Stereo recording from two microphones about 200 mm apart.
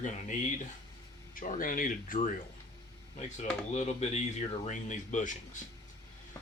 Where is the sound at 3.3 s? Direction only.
35° left (ahead or behind).